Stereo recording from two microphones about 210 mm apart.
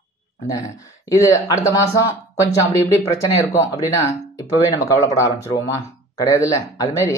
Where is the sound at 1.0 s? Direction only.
15° left (ahead or behind).